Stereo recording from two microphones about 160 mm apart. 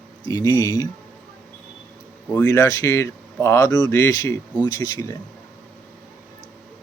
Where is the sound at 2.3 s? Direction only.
10° left (ahead or behind).